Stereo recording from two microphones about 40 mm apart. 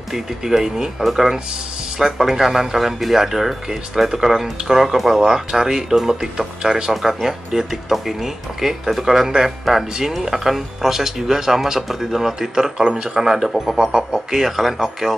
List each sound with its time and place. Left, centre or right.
0.1 s speech: centre
6.9 s speech: centre